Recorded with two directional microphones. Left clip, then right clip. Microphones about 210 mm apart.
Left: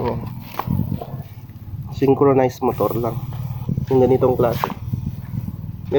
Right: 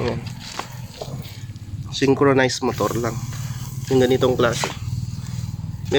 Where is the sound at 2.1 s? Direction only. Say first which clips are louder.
Left 1 dB; 5° right (ahead or behind).